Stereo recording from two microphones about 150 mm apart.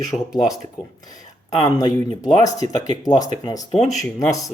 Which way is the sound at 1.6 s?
25° left (ahead or behind).